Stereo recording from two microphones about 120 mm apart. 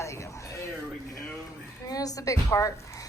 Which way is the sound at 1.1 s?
5° left (ahead or behind).